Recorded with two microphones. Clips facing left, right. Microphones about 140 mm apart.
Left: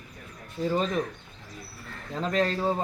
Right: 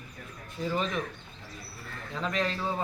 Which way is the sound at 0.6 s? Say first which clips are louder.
Left 4 dB; 40° left (ahead or behind).